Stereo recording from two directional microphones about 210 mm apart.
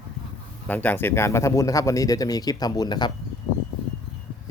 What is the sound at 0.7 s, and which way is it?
Speech, 10° left (ahead or behind).